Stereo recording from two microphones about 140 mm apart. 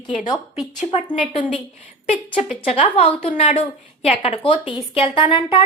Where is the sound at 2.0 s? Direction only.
55° left (ahead or behind).